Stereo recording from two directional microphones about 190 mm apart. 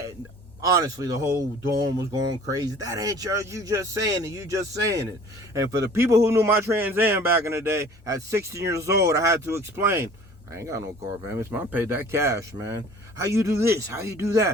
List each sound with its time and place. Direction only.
0.6 s a man's voice: 15° right (ahead or behind)